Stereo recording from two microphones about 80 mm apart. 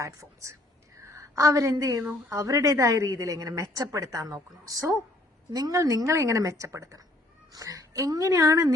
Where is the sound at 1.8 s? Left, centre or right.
Right.